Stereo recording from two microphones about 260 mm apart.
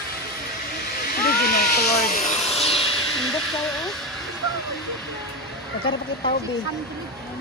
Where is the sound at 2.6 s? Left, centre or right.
Left.